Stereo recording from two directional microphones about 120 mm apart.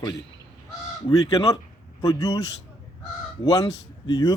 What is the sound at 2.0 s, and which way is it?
Speech, 30° left (ahead or behind).